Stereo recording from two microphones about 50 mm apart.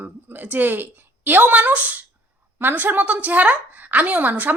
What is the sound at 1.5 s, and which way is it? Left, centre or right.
Speech, right.